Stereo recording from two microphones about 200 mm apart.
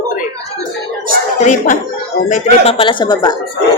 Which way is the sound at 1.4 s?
35° left (ahead or behind).